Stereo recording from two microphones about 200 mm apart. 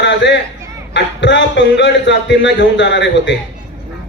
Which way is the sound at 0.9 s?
60° left (ahead or behind).